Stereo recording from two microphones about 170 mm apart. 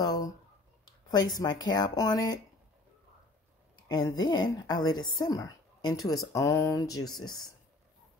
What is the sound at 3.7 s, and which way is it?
Speech, 25° left (ahead or behind).